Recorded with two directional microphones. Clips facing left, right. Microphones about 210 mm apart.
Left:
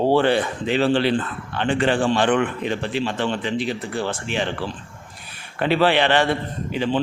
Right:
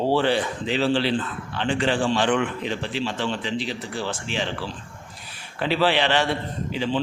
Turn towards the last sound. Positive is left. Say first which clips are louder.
# left 3 dB
turn(degrees=55)  # may be behind; listen again after turning